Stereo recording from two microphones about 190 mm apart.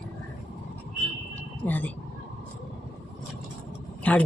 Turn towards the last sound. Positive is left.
turn(degrees=5)  # may be behind; listen again after turning